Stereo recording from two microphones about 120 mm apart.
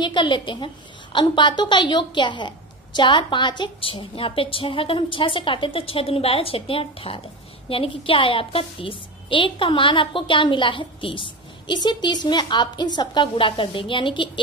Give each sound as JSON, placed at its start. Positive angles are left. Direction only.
{"t": 0.0, "sound": "a woman's voice", "side_deg": 40}